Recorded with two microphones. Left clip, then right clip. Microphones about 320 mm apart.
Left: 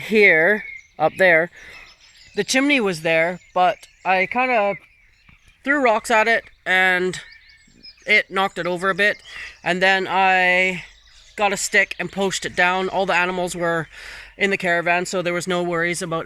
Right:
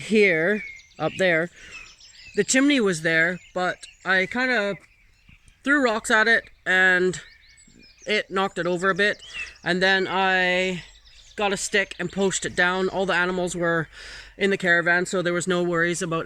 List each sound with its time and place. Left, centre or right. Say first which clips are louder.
0.0 s speech: left 5 dB; centre
2.3 s speech: left 2 dB; centre